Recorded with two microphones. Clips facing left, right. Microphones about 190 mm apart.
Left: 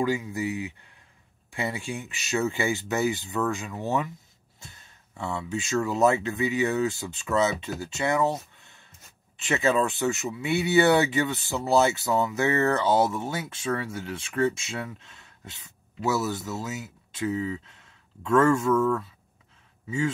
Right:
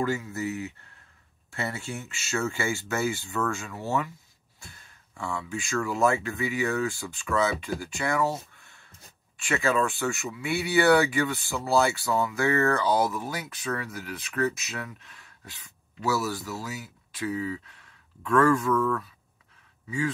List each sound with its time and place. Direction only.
0.0 s speech: 15° left (ahead or behind)